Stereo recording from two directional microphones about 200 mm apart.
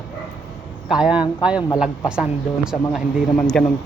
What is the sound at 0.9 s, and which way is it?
Speech, 5° right (ahead or behind).